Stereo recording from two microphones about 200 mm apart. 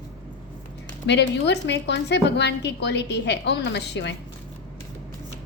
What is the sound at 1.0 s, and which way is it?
A woman's voice, 60° left (ahead or behind).